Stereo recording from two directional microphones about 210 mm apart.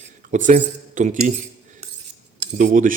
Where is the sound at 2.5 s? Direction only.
40° right (ahead or behind).